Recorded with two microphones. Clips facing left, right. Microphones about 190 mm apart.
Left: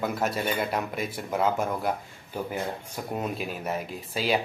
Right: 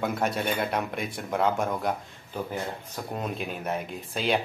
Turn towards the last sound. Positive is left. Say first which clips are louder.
# even
turn(degrees=5)  # may be behind; listen again after turning